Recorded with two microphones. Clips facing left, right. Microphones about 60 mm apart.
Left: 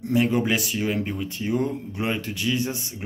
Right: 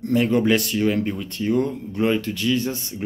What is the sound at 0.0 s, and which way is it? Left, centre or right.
Speech, centre.